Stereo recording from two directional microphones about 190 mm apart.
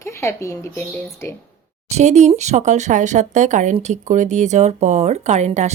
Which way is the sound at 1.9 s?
40° right (ahead or behind).